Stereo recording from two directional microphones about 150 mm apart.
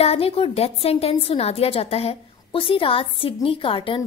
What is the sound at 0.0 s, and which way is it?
Speech, 40° left (ahead or behind).